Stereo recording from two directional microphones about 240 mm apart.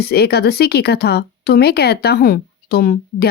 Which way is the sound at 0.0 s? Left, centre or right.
Left.